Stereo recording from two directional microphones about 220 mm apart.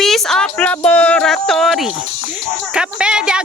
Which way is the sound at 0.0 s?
Centre (ahead or behind).